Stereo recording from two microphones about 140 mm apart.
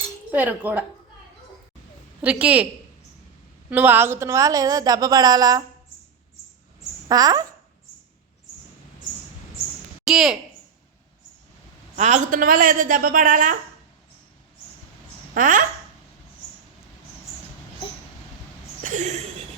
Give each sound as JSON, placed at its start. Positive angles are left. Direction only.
{"t": 0.3, "sound": "speech", "side_deg": -10}
{"t": 2.2, "sound": "speech", "side_deg": -10}
{"t": 3.7, "sound": "a woman's voice", "side_deg": -10}
{"t": 7.1, "sound": "a woman's voice", "side_deg": -25}
{"t": 10.0, "sound": "speech", "side_deg": -5}
{"t": 11.9, "sound": "a woman's voice", "side_deg": -55}
{"t": 15.4, "sound": "a woman's voice", "side_deg": -70}
{"t": 18.8, "sound": "a sound", "side_deg": -65}